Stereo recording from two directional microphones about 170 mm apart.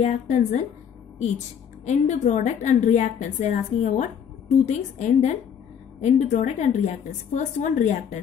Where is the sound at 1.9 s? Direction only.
45° left (ahead or behind).